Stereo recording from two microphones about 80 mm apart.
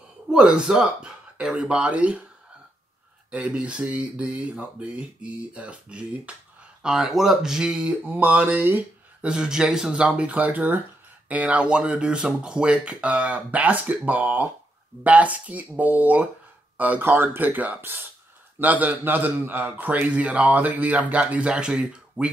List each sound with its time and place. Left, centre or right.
0.3 s speech: centre
3.3 s speech: centre
8.1 s a man's voice: right
9.2 s a man's voice: centre